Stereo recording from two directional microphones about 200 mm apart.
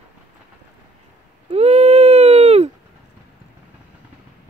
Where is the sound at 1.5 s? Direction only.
30° right (ahead or behind).